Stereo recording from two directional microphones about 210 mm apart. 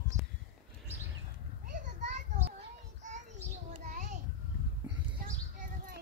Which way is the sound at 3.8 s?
35° right (ahead or behind).